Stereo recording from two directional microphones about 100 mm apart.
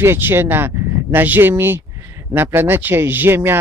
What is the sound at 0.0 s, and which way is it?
Speech, 25° right (ahead or behind).